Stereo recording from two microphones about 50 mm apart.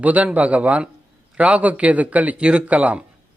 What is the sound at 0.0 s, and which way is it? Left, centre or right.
A man's voice, right.